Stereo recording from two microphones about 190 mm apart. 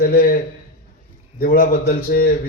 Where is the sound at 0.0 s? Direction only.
50° left (ahead or behind).